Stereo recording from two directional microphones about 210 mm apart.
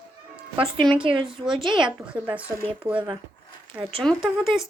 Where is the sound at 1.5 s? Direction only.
20° right (ahead or behind).